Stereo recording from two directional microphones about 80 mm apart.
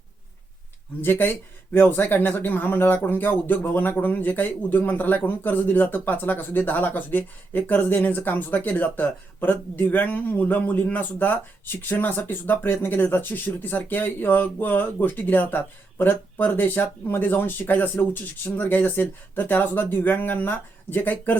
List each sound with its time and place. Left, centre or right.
1.0 s speech: left